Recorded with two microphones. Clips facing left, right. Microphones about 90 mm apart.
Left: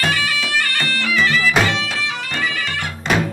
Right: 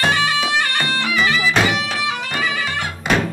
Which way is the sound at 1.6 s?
15° right (ahead or behind).